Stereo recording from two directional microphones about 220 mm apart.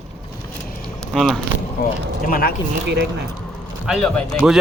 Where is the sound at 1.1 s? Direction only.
Centre (ahead or behind).